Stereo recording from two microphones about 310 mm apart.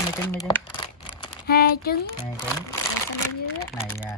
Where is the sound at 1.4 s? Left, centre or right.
Left.